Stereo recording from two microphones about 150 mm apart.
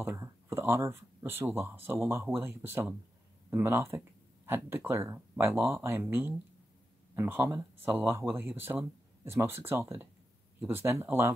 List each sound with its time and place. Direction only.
0.0 s speech: 15° right (ahead or behind)